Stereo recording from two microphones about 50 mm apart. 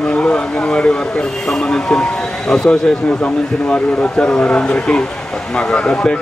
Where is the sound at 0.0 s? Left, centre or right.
Centre.